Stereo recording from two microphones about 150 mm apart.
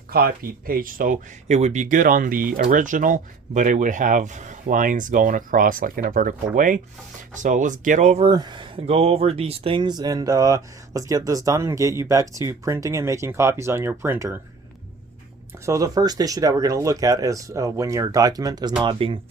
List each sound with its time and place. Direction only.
0.1 s speech: 80° right
1.5 s speech: 50° right (ahead or behind)
8.3 s speech: 30° right (ahead or behind)
15.6 s speech: 20° right (ahead or behind)